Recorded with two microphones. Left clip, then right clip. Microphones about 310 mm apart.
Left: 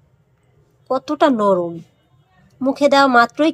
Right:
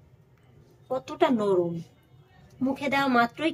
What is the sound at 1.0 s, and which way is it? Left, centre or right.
Speech, centre.